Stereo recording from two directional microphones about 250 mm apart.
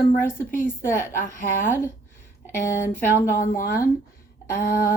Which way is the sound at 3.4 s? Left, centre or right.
Left.